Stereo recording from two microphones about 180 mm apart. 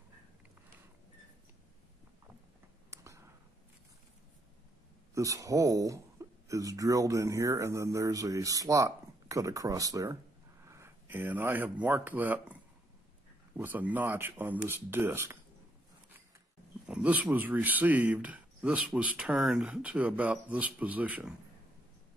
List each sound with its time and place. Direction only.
2.9 s clicking: 15° right (ahead or behind)
5.1 s speech: 20° right (ahead or behind)
13.6 s speech: 10° right (ahead or behind)
16.8 s speech: 5° right (ahead or behind)